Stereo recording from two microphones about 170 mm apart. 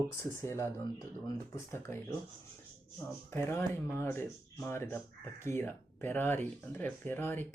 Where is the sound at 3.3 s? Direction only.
15° left (ahead or behind).